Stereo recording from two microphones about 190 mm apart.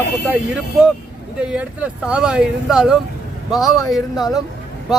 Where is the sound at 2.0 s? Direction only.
5° right (ahead or behind).